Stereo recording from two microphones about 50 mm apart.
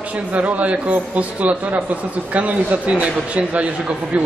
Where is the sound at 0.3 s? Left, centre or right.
Right.